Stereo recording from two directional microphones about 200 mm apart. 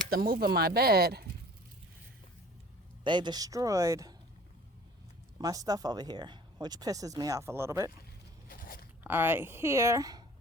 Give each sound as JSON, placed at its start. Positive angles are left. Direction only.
{"t": 0.1, "sound": "speech", "side_deg": -50}
{"t": 3.0, "sound": "speech", "side_deg": -25}
{"t": 5.4, "sound": "speech", "side_deg": -20}
{"t": 8.4, "sound": "crunch", "side_deg": 45}
{"t": 9.0, "sound": "speech", "side_deg": -10}